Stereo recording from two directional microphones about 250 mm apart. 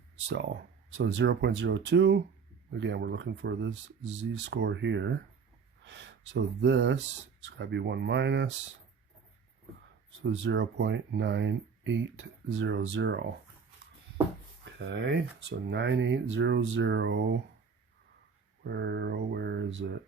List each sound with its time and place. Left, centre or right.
0.3 s speech: right
10.2 s speech: right
14.6 s speech: right
18.6 s speech: right